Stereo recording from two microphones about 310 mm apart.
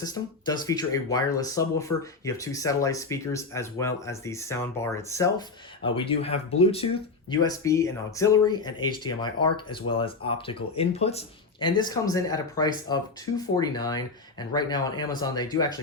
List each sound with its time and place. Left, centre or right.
0.0 s speech: centre